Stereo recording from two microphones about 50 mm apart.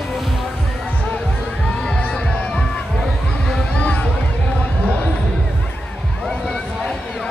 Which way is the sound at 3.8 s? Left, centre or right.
Left.